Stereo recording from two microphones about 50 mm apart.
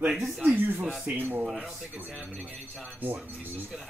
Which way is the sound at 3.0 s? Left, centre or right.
Right.